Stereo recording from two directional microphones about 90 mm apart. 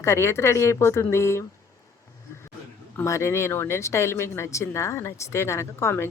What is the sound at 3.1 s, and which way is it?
Speech, 35° left (ahead or behind).